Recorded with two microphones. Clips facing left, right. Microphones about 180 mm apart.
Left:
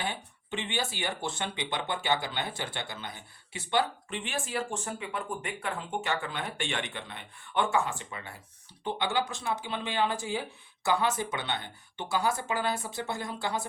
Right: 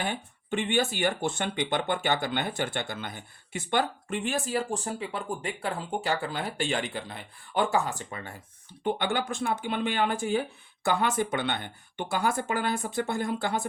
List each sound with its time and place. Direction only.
0.0 s speech: 50° right (ahead or behind)